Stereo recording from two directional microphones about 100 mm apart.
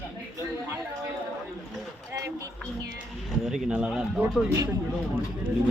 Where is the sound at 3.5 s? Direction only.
10° right (ahead or behind).